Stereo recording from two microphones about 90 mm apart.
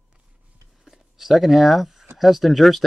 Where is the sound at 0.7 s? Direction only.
5° right (ahead or behind).